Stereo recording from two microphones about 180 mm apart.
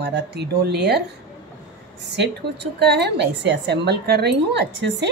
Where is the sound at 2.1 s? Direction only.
70° right (ahead or behind).